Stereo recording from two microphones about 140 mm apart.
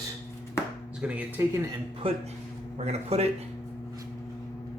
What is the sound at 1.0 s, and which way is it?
Speech, 10° right (ahead or behind).